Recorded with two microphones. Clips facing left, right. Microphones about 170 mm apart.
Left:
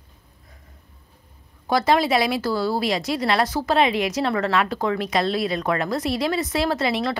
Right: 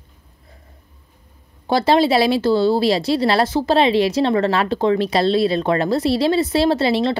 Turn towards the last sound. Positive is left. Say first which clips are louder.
# right 6 dB
turn(degrees=-30)  # may be behind; listen again after turning